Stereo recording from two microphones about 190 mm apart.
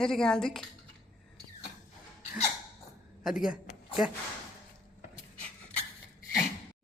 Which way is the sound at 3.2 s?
5° right (ahead or behind).